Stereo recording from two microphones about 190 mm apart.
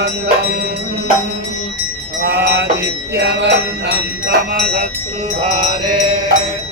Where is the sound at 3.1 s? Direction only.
60° right (ahead or behind).